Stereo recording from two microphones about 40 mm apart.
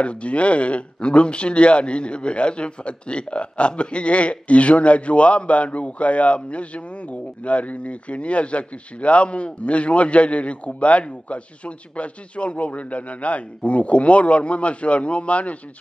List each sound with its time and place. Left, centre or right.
0.0 s speech: left